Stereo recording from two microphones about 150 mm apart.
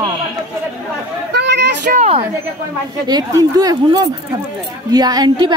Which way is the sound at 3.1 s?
25° right (ahead or behind).